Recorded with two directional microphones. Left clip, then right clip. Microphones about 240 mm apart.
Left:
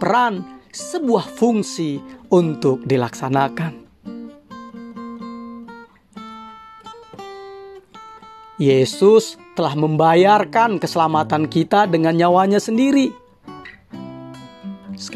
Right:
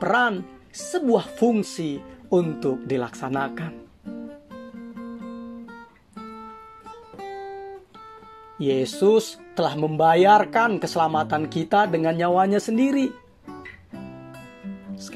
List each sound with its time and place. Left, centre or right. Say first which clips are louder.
0.0 s speech: left 4 dB; left
4.8 s music: left 6 dB; left
8.5 s speech: left 7 dB; left
14.6 s music: left 7 dB; left